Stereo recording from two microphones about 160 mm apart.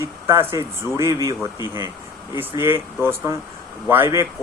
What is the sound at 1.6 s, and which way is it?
Speech, 30° left (ahead or behind).